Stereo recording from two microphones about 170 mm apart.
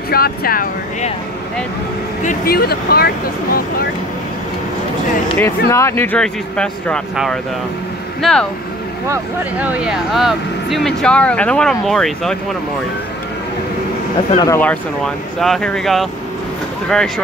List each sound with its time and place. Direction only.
0.1 s speech: 60° left (ahead or behind)
2.2 s speech: 65° left (ahead or behind)
5.4 s speech: 15° left (ahead or behind)
9.1 s speech: 10° right (ahead or behind)
14.4 s speech: 15° left (ahead or behind)
15.4 s speech: 5° left (ahead or behind)